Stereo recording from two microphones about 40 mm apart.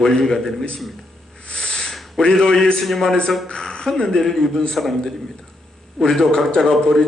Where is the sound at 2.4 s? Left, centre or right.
Centre.